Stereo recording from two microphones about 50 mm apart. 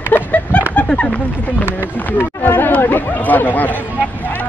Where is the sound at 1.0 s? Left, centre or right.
Left.